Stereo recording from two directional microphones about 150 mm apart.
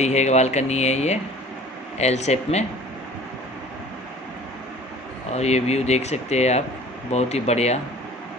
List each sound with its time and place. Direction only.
0.0 s speech: 45° left (ahead or behind)
5.3 s speech: 45° left (ahead or behind)